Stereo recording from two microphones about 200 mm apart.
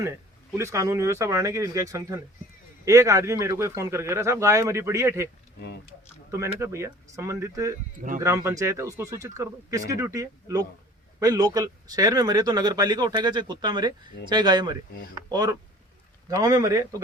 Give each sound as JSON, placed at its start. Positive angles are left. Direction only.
{"t": 0.5, "sound": "a man's voice", "side_deg": -15}
{"t": 5.5, "sound": "speech", "side_deg": 55}
{"t": 6.3, "sound": "a man's voice", "side_deg": -15}